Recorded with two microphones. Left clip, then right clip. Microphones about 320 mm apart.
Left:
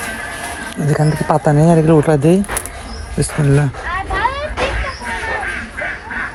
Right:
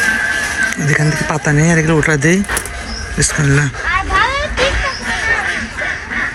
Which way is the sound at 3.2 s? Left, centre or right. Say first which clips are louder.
Right 2 dB; centre.